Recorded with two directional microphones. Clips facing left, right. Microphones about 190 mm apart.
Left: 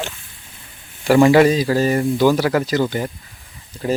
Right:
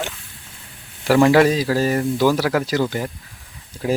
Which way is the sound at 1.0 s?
Centre (ahead or behind).